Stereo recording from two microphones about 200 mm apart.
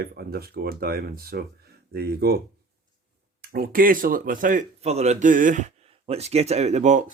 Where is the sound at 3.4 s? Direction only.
50° right (ahead or behind).